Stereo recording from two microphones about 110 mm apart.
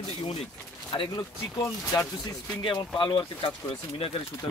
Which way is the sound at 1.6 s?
30° left (ahead or behind).